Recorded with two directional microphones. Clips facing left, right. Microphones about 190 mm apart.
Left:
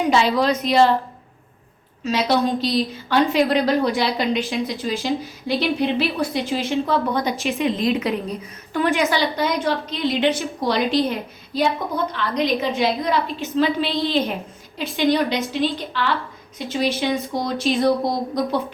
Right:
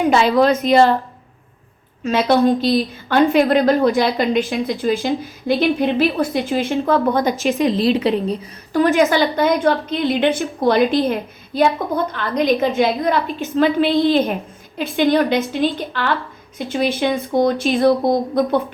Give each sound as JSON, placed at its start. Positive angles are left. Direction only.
{"t": 0.1, "sound": "a woman's voice", "side_deg": -55}
{"t": 2.0, "sound": "a woman's voice", "side_deg": -55}
{"t": 7.6, "sound": "a woman's voice", "side_deg": -35}
{"t": 9.0, "sound": "a woman's voice", "side_deg": -50}